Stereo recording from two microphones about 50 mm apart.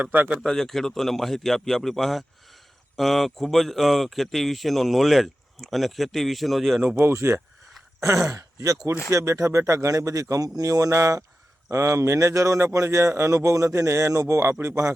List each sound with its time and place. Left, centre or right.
0.0 s speech: right
0.3 s speech: centre
7.0 s speech: right
8.0 s speech: right